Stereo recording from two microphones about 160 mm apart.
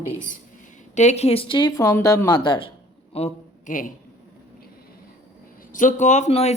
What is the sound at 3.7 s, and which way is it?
Speech, 55° left (ahead or behind).